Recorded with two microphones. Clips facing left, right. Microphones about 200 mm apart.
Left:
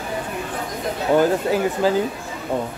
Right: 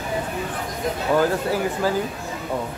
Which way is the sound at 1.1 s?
20° left (ahead or behind).